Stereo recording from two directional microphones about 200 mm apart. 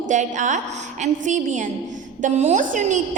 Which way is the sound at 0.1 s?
40° right (ahead or behind).